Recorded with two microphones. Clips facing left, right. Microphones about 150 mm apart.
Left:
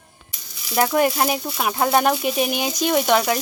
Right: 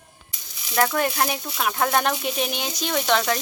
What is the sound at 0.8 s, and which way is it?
Frying, 15° left (ahead or behind).